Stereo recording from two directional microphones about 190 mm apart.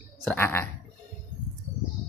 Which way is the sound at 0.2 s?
10° left (ahead or behind).